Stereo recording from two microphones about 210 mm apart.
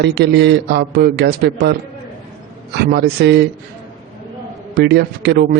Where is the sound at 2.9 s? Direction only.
50° right (ahead or behind).